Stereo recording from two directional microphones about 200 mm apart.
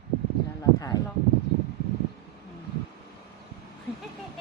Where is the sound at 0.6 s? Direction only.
15° left (ahead or behind).